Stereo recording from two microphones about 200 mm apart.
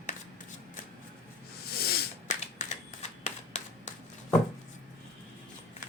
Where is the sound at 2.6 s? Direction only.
35° left (ahead or behind).